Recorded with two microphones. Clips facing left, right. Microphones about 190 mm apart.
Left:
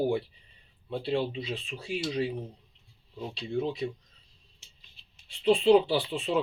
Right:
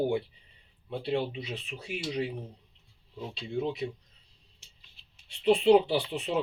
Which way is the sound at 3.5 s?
20° right (ahead or behind).